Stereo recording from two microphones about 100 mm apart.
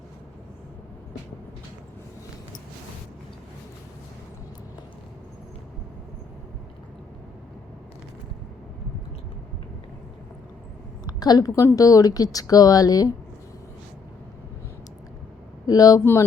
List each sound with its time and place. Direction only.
11.0 s a woman's voice: 40° left (ahead or behind)
15.6 s speech: 40° left (ahead or behind)